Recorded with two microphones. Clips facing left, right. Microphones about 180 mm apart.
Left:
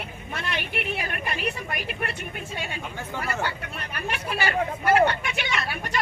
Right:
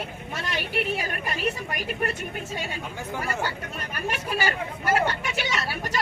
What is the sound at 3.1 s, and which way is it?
Speech, 10° right (ahead or behind).